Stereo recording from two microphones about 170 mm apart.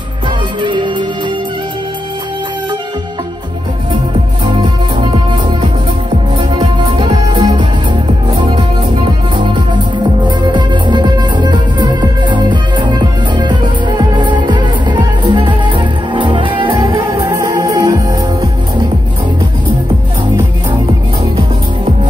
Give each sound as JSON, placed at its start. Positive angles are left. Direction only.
{"t": 0.6, "sound": "music", "side_deg": -30}
{"t": 6.3, "sound": "music", "side_deg": -25}